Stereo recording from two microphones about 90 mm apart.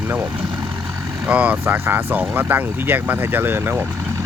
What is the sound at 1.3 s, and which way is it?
Speech, 15° right (ahead or behind).